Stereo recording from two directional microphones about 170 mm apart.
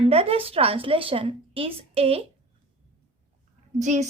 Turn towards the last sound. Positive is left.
turn(degrees=-45)  # may be behind; listen again after turning